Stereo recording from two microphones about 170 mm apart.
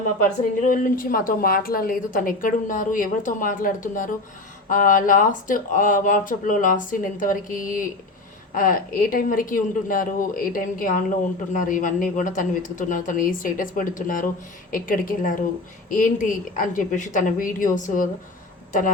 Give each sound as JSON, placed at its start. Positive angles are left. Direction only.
{"t": 0.0, "sound": "a woman's voice", "side_deg": 50}